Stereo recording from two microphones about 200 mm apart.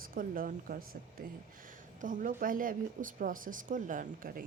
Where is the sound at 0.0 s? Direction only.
45° right (ahead or behind).